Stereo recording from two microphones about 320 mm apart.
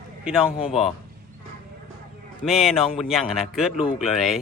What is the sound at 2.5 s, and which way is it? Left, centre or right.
Speech, centre.